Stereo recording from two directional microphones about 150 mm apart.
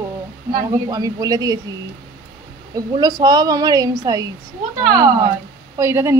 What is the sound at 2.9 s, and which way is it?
A woman's voice, 30° right (ahead or behind).